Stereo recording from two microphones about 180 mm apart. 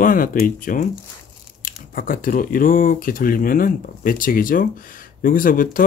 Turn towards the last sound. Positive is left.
turn(degrees=50)  # may be behind; listen again after turning